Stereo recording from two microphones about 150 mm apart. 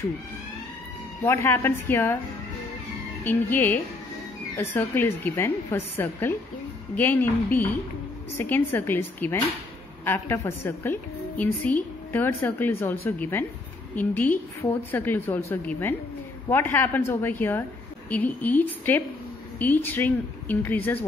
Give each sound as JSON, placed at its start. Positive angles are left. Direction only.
{"t": 1.2, "sound": "a woman's voice", "side_deg": 20}
{"t": 3.3, "sound": "a woman's voice", "side_deg": 15}